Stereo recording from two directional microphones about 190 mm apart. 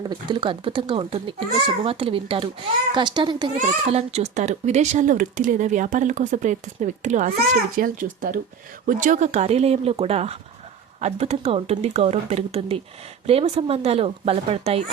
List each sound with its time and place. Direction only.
0.1 s a child's voice: 25° right (ahead or behind)
3.5 s a child's voice: 35° right (ahead or behind)